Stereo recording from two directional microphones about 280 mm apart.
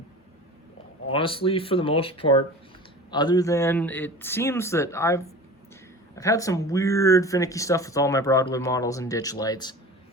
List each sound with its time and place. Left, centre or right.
1.1 s speech: centre